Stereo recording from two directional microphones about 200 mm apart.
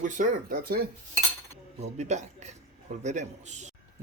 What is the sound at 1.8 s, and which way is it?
Speech, 35° right (ahead or behind).